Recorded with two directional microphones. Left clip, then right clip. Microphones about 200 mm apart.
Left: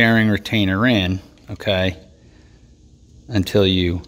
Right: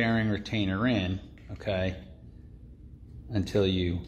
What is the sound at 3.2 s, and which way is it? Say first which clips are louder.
Speech: left 10 dB; 55° left (ahead or behind).